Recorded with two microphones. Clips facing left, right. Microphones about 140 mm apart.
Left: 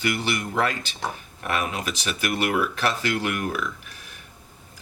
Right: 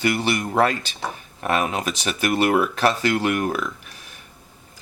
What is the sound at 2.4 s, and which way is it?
Speech, 45° right (ahead or behind).